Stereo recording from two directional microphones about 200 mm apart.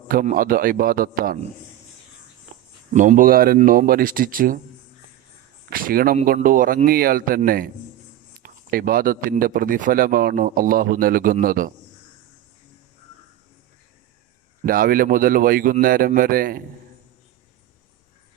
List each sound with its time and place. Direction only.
0.1 s speech: 45° right (ahead or behind)
2.9 s speech: 40° right (ahead or behind)
5.7 s speech: 45° right (ahead or behind)
14.6 s speech: 45° right (ahead or behind)